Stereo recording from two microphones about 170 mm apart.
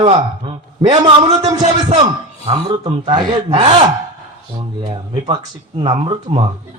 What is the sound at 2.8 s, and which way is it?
Speech, 30° right (ahead or behind).